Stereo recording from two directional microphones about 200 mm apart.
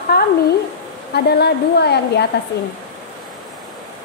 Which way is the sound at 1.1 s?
55° left (ahead or behind).